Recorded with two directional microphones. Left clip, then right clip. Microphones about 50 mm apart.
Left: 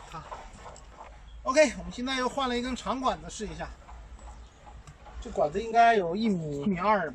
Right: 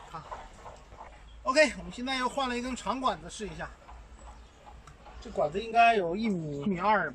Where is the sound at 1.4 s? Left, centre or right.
Centre.